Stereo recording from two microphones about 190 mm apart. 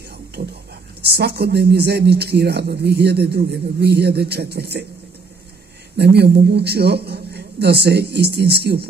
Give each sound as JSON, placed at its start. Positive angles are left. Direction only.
{"t": 0.4, "sound": "speech", "side_deg": -60}
{"t": 5.9, "sound": "speech", "side_deg": -60}